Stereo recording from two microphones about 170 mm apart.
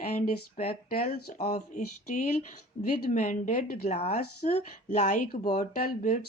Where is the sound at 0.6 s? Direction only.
55° left (ahead or behind).